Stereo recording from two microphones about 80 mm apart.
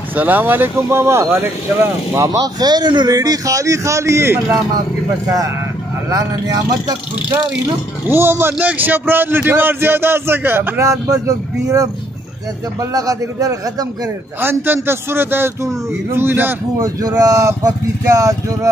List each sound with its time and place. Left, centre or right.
0.1 s a man's voice: right
2.1 s speech: right
3.2 s speech: right
6.0 s speech: right
8.1 s a man's voice: right
12.9 s speech: right
14.4 s a man's voice: right
16.8 s speech: right